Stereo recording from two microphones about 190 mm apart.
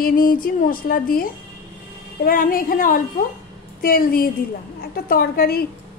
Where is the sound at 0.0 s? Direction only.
50° left (ahead or behind).